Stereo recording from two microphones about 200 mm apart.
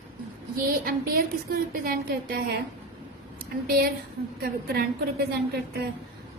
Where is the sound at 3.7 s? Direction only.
50° right (ahead or behind).